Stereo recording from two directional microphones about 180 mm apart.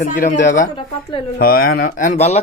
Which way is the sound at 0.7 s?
30° left (ahead or behind).